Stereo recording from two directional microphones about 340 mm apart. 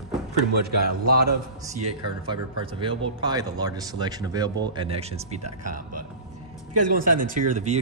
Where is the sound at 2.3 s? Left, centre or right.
Centre.